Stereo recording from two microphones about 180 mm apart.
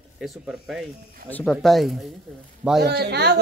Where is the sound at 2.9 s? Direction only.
65° right (ahead or behind).